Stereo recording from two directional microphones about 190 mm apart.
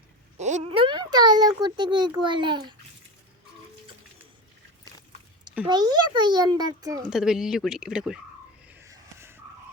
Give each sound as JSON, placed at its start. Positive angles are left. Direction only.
{"t": 0.3, "sound": "speech", "side_deg": -35}
{"t": 5.6, "sound": "a child's voice", "side_deg": -20}
{"t": 7.1, "sound": "speech", "side_deg": -5}
{"t": 8.7, "sound": "a sound", "side_deg": -15}